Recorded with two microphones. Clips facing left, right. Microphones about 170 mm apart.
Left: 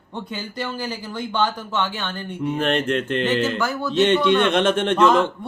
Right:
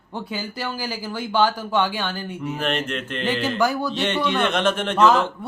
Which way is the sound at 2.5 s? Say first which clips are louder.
Left 5 dB; 30° left (ahead or behind).